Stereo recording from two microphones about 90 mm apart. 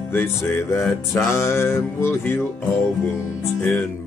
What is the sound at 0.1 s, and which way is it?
Music, 25° left (ahead or behind).